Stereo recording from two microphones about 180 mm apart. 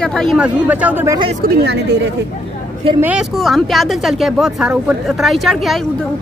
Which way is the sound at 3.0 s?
5° right (ahead or behind).